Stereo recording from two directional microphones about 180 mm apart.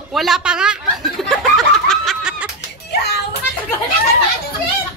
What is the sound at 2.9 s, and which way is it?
Music, 65° left (ahead or behind).